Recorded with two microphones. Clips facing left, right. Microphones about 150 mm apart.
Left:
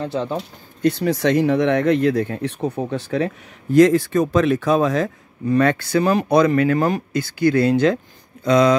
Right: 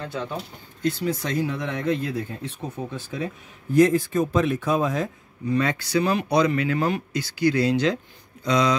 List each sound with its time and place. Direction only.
0.0 s speech: 30° left (ahead or behind)
0.8 s speech: 65° left (ahead or behind)
5.5 s speech: 60° left (ahead or behind)